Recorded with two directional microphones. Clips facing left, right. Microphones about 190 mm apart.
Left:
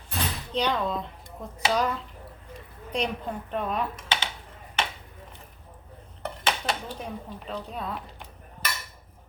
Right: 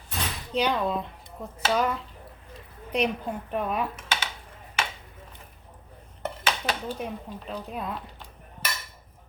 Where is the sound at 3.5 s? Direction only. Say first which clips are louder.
Right 1 dB; 5° right (ahead or behind).